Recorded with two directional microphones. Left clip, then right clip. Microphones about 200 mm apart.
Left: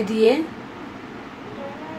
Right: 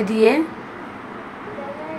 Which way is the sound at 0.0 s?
10° right (ahead or behind).